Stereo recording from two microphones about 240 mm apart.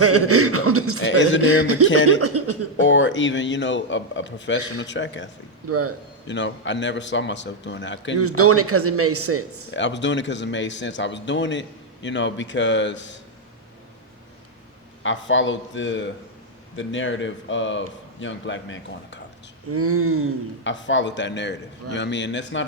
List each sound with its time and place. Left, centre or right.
0.0 s speech: right
1.0 s speech: left
1.4 s speech: right
2.8 s speech: left
5.6 s speech: right
6.2 s speech: left
8.4 s speech: right
9.7 s speech: left
15.0 s speech: left
19.7 s a sound: right
20.7 s speech: left